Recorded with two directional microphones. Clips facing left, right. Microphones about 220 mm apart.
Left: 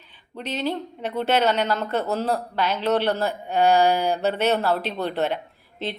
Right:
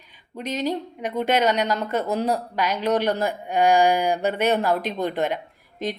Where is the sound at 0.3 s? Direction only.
10° right (ahead or behind).